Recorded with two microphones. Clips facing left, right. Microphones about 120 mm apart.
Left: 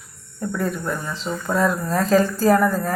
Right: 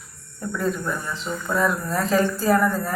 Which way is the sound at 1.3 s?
25° left (ahead or behind).